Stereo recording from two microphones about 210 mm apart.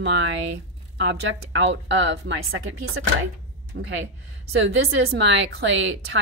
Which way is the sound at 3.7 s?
50° right (ahead or behind).